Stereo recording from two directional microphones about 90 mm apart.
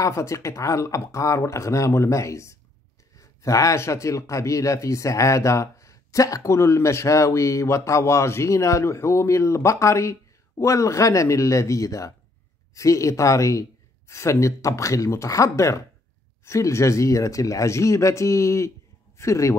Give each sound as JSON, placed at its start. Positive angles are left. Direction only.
{"t": 0.0, "sound": "speech", "side_deg": 35}